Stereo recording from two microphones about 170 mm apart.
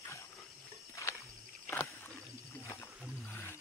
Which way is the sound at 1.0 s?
20° left (ahead or behind).